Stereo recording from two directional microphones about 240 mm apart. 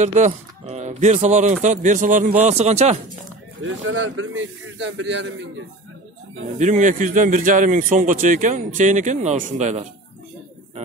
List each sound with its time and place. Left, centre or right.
0.0 s speech: right
3.6 s speech: right
6.6 s a man's voice: right